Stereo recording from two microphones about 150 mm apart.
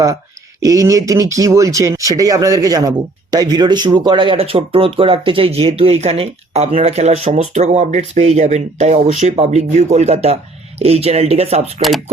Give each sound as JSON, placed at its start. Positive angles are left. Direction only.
{"t": 0.6, "sound": "speech", "side_deg": -20}
{"t": 11.8, "sound": "speech", "side_deg": 0}